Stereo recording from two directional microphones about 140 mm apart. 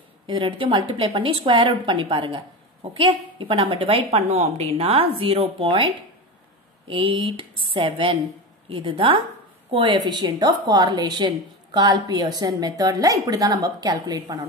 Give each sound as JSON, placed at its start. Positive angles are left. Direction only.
{"t": 0.3, "sound": "speech", "side_deg": -35}
{"t": 6.9, "sound": "a woman's voice", "side_deg": -40}